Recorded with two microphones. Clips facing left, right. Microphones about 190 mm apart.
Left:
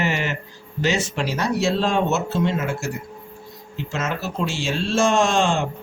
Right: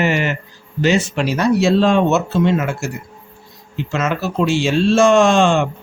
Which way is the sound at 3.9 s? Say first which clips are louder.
Right 6 dB; 75° right (ahead or behind).